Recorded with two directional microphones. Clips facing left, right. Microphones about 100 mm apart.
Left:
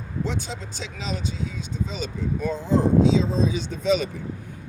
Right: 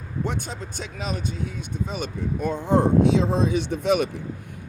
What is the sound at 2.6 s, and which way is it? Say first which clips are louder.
Speech: even; 60° right (ahead or behind).